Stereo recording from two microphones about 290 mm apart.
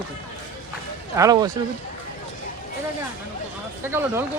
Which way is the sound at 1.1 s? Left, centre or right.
Centre.